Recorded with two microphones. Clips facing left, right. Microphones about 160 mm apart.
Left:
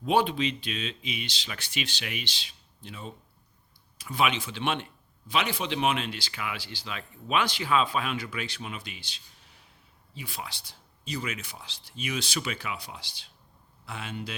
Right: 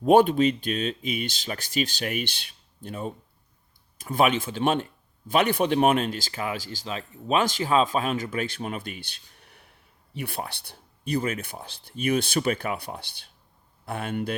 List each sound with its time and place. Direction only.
0.0 s speech: 50° right (ahead or behind)
5.3 s speech: 55° right (ahead or behind)